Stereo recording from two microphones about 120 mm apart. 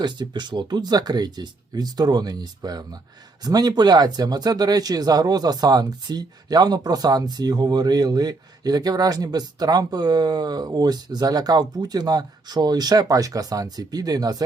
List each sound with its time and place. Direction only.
0.0 s speech: 40° right (ahead or behind)